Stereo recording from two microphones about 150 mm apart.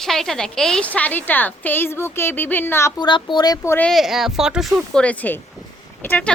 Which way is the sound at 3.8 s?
Centre (ahead or behind).